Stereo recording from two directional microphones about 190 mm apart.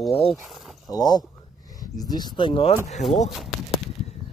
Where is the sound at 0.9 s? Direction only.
20° left (ahead or behind).